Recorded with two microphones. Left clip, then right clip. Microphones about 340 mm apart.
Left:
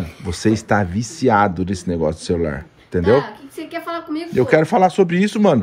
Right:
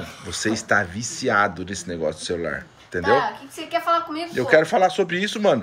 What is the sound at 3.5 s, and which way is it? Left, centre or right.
Speech, centre.